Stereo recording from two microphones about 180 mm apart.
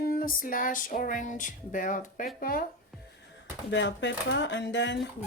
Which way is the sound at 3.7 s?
90° left.